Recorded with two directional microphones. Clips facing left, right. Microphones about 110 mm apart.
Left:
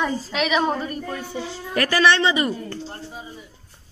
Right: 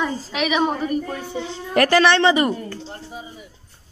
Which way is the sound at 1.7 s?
60° right (ahead or behind).